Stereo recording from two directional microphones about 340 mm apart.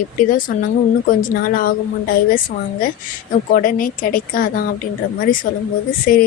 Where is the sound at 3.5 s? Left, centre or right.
Left.